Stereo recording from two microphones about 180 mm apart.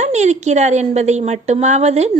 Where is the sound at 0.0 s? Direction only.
40° right (ahead or behind).